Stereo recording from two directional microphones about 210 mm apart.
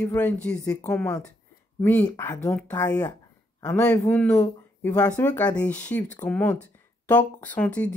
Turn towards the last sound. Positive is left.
turn(degrees=5)  # may be behind; listen again after turning